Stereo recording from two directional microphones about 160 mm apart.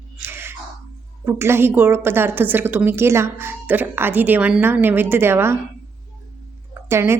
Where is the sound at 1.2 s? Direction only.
15° right (ahead or behind).